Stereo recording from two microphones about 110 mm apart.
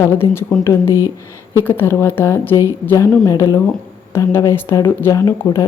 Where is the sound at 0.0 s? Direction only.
20° left (ahead or behind).